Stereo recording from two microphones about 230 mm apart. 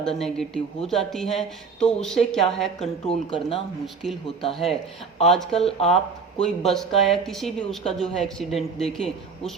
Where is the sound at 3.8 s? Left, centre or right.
Centre.